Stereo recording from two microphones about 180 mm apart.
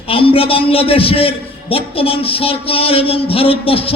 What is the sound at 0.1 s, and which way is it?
A man's voice, 30° left (ahead or behind).